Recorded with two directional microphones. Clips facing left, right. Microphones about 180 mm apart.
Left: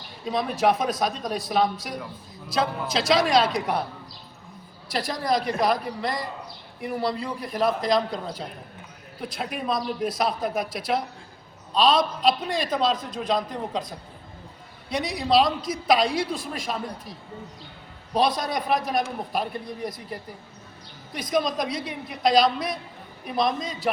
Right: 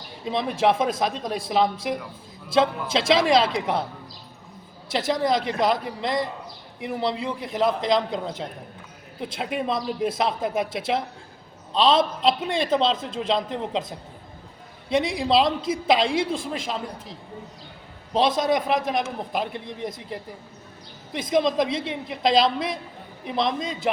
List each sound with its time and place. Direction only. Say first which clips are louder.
0.3 s a woman's voice: right 1 dB; 25° right (ahead or behind)
4.9 s a woman's voice: right 3 dB; 25° right (ahead or behind)
14.8 s a woman's voice: right 3 dB; 25° right (ahead or behind)
21.1 s a woman's voice: right 3 dB; 25° right (ahead or behind)